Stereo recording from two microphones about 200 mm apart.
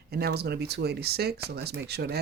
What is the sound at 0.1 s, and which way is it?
Speech, 50° right (ahead or behind).